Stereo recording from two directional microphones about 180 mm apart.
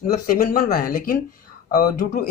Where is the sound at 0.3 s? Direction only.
50° left (ahead or behind).